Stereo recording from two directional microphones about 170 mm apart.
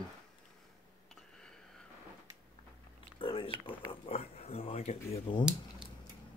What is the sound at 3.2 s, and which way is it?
Speech, 30° left (ahead or behind).